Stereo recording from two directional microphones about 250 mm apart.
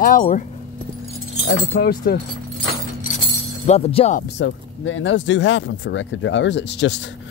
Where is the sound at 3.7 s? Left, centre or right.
Left.